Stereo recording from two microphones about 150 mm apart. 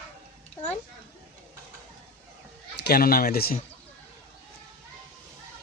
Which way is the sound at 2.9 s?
85° left.